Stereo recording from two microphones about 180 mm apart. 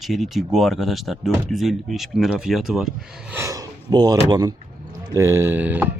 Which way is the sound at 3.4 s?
20° right (ahead or behind).